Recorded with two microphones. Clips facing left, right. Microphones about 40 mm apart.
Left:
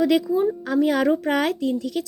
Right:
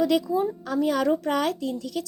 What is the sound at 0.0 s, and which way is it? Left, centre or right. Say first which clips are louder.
Speech: left 3 dB; left.